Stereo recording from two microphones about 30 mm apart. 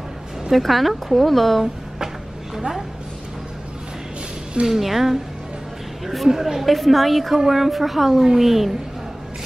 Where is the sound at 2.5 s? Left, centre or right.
Centre.